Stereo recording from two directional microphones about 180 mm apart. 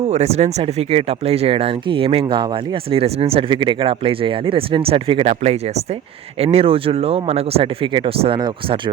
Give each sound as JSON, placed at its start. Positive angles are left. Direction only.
{"t": 0.1, "sound": "speech", "side_deg": -35}